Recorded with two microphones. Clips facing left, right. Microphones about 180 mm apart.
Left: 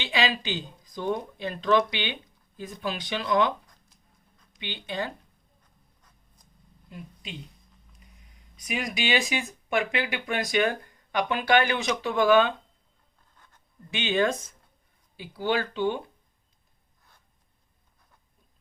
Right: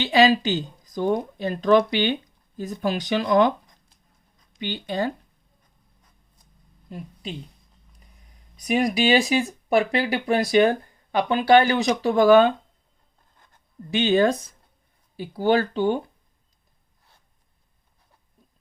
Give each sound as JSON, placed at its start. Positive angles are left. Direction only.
{"t": 0.0, "sound": "speech", "side_deg": -40}
{"t": 4.6, "sound": "speech", "side_deg": -40}
{"t": 6.9, "sound": "speech", "side_deg": -35}
{"t": 8.6, "sound": "speech", "side_deg": -35}
{"t": 13.9, "sound": "speech", "side_deg": -35}